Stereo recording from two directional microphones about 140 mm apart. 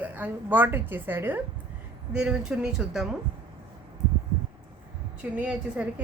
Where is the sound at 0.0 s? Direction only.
15° right (ahead or behind).